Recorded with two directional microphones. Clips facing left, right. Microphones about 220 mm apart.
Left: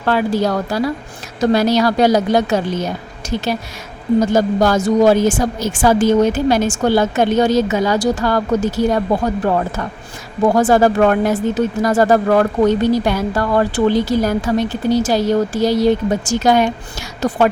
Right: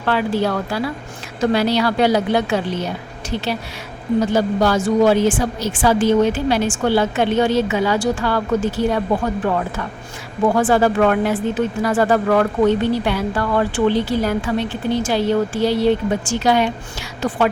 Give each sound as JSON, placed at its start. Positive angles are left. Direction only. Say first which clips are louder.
{"t": 0.0, "sound": "a woman's voice", "louder": "left 2 dB", "side_deg": 40}